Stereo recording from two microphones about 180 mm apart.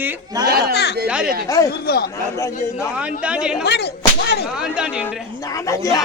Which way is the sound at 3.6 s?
65° left (ahead or behind).